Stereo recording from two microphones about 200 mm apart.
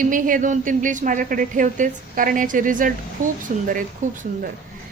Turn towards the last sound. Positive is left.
turn(degrees=-45)  # may be behind; listen again after turning